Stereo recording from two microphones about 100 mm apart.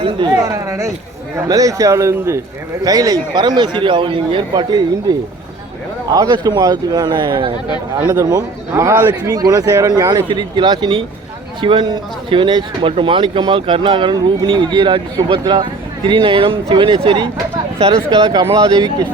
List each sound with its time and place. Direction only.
0.3 s a man's voice: 40° right (ahead or behind); by 4.4 s 60° right (ahead or behind)
4.5 s a man's voice: 45° right (ahead or behind)
8.0 s a man's voice: 35° right (ahead or behind); by 17.2 s 55° right (ahead or behind)
18.1 s a man's voice: 45° right (ahead or behind)